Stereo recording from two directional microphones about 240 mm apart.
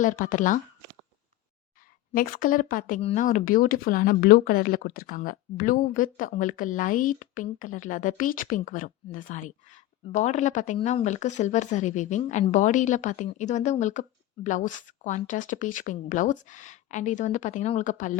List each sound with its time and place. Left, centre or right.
0.0 s speech: left
2.1 s speech: left